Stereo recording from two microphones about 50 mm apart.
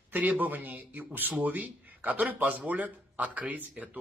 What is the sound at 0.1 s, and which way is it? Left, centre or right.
Speech, right.